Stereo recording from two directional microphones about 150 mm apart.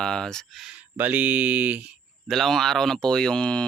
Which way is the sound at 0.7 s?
10° right (ahead or behind).